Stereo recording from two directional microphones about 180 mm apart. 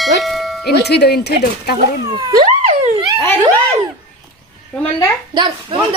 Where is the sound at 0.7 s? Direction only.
65° left (ahead or behind).